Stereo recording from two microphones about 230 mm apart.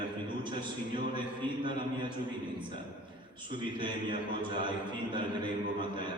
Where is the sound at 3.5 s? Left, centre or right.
Centre.